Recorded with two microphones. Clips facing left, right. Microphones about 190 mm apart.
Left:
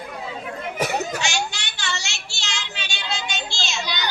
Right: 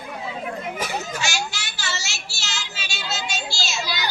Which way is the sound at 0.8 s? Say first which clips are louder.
Left 4 dB; 65° left (ahead or behind).